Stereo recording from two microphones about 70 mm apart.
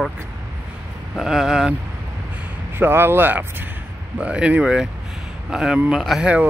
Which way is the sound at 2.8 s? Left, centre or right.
Right.